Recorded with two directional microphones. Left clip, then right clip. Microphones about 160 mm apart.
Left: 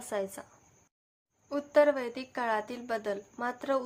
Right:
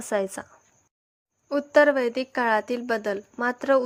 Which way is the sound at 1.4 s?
45° right (ahead or behind).